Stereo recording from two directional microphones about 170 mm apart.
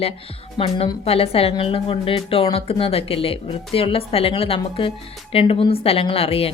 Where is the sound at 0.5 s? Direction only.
30° left (ahead or behind).